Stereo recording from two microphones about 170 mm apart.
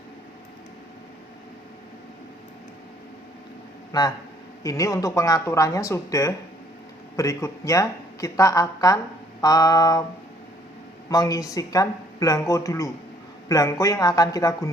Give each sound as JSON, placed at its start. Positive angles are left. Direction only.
{"t": 3.9, "sound": "speech", "side_deg": 20}
{"t": 11.1, "sound": "speech", "side_deg": 20}